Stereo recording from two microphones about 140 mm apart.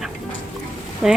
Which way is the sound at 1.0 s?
5° right (ahead or behind).